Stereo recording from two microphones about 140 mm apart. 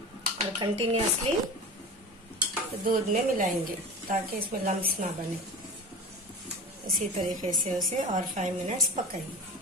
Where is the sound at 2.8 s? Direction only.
75° right (ahead or behind).